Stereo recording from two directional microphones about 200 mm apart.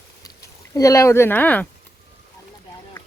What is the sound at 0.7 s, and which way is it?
Speech, 15° left (ahead or behind).